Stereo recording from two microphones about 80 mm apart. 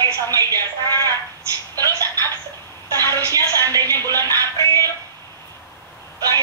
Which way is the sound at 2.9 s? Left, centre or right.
Left.